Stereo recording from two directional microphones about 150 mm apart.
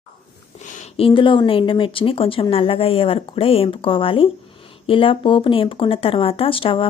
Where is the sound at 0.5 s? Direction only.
55° left (ahead or behind).